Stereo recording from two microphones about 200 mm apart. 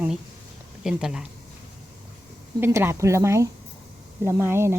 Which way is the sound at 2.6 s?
10° right (ahead or behind).